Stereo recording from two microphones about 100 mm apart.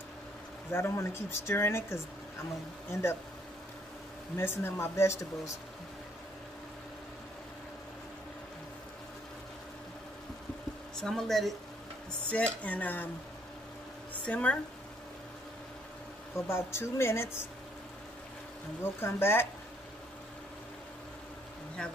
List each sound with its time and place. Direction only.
0.7 s speech: 25° left (ahead or behind)
4.4 s speech: 25° left (ahead or behind)
11.0 s speech: 5° left (ahead or behind)
12.3 s speech: 15° left (ahead or behind)
14.2 s speech: 15° left (ahead or behind)
16.3 s speech: 25° left (ahead or behind)
18.8 s speech: 25° left (ahead or behind)